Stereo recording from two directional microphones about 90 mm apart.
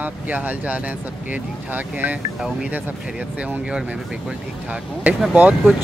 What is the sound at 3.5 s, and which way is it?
Speech, 10° right (ahead or behind).